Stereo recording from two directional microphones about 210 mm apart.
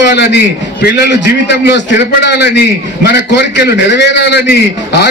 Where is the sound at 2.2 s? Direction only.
50° left (ahead or behind).